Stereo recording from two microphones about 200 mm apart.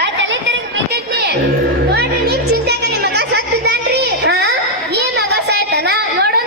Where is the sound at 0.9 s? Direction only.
55° right (ahead or behind).